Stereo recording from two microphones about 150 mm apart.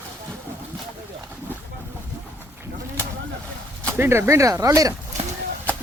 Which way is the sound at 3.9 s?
15° right (ahead or behind).